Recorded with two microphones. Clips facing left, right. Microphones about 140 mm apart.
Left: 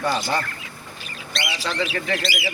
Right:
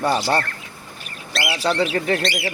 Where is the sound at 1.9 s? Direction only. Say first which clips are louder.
Right 5 dB; 35° right (ahead or behind).